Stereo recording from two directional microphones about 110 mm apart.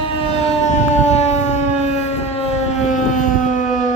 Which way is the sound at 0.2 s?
80° left.